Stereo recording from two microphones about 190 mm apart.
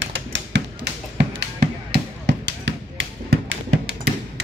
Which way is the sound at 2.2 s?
75° right (ahead or behind).